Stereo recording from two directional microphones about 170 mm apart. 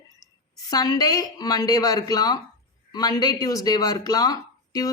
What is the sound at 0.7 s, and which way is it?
A woman's voice, 20° left (ahead or behind).